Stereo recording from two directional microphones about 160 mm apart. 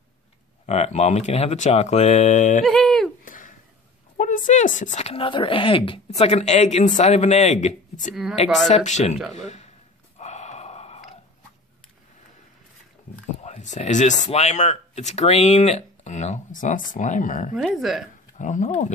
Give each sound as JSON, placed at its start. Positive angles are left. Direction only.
{"t": 0.7, "sound": "speech", "side_deg": 45}
{"t": 2.6, "sound": "speech", "side_deg": 0}
{"t": 3.3, "sound": "a sound", "side_deg": 55}
{"t": 4.2, "sound": "speech", "side_deg": 55}
{"t": 8.1, "sound": "speech", "side_deg": -5}
{"t": 8.6, "sound": "speech", "side_deg": 45}
{"t": 10.1, "sound": "snort", "side_deg": 45}
{"t": 13.4, "sound": "speech", "side_deg": 45}
{"t": 17.6, "sound": "speech", "side_deg": 0}
{"t": 18.4, "sound": "speech", "side_deg": 50}